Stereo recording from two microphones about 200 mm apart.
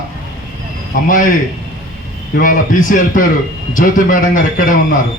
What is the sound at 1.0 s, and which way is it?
Speech, 40° left (ahead or behind).